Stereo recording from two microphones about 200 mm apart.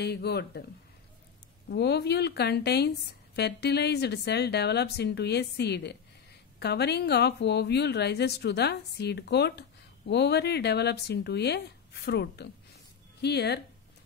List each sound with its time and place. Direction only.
0.0 s speech: 55° left (ahead or behind)
1.7 s a woman's voice: 55° left (ahead or behind)